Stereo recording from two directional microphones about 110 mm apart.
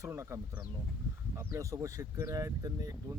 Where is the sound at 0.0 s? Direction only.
25° right (ahead or behind).